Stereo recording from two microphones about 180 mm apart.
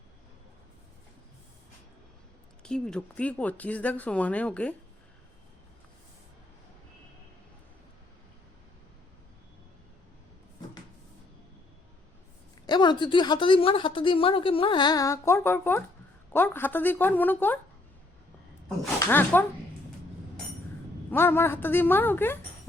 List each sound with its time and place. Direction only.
2.6 s speech: 5° left (ahead or behind)
12.6 s a woman's voice: 25° left (ahead or behind)
18.9 s speech: 10° left (ahead or behind)
21.1 s speech: 15° left (ahead or behind)